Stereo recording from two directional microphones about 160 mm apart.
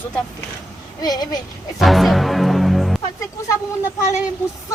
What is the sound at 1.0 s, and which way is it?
Speech, 25° left (ahead or behind).